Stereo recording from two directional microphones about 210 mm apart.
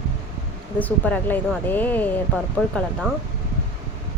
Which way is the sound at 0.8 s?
5° left (ahead or behind).